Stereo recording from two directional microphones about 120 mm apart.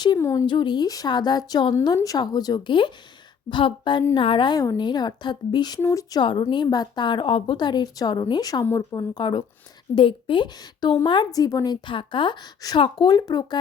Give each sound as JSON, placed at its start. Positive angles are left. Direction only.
{"t": 0.2, "sound": "a woman's voice", "side_deg": 25}
{"t": 0.4, "sound": "a woman's voice", "side_deg": 40}